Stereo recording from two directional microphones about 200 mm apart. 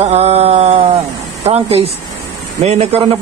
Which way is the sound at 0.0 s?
30° right (ahead or behind).